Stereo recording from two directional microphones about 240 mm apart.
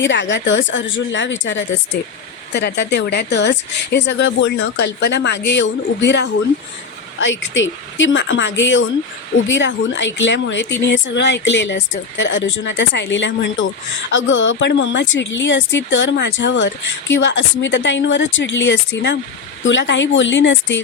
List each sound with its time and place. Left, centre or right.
0.0 s speech: left